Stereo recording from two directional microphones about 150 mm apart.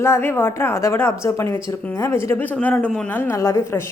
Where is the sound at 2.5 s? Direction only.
5° left (ahead or behind).